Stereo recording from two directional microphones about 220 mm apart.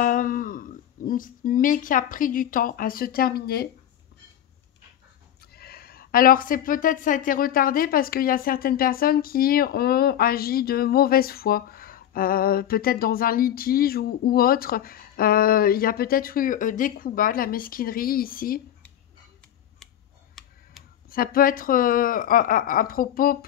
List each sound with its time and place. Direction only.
0.0 s speech: 40° left (ahead or behind)
5.5 s speech: 45° left (ahead or behind)
20.4 s tick-tock: centre (ahead or behind)
21.1 s speech: 40° left (ahead or behind)